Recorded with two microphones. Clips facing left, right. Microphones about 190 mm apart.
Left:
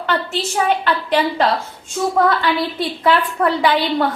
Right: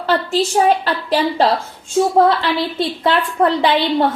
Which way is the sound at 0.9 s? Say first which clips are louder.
Even; 35° right (ahead or behind).